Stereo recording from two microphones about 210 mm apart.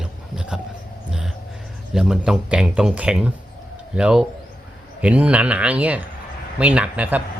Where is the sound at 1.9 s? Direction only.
5° right (ahead or behind).